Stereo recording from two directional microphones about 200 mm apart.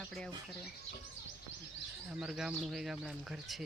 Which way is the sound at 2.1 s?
5° right (ahead or behind).